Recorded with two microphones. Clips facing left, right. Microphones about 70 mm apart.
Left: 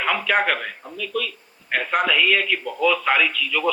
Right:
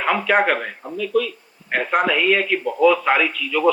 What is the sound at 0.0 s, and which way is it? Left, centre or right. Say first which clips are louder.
A man's voice: right 3 dB; right.